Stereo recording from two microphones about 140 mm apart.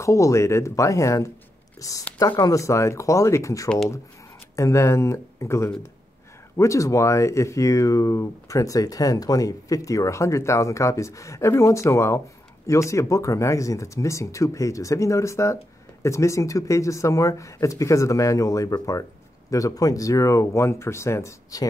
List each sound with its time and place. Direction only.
0.0 s speech: 20° left (ahead or behind)